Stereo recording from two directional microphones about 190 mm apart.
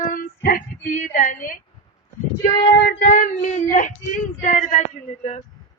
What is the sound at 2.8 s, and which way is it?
A man's voice, 50° left (ahead or behind).